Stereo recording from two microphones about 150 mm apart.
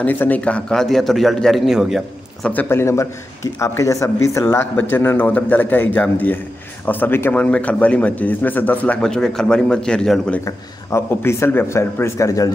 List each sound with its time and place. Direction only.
0.0 s a man's voice: 10° left (ahead or behind)
2.5 s a man's voice: 15° left (ahead or behind)
10.4 s speech: 20° left (ahead or behind)